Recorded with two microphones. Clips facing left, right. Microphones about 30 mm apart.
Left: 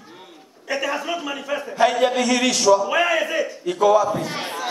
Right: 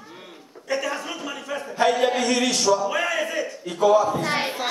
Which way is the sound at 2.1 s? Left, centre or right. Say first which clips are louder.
Left 2 dB; centre.